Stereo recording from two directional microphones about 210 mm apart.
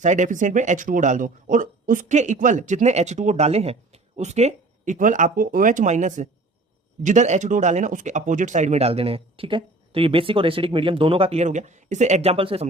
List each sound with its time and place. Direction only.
0.0 s speech: 35° right (ahead or behind)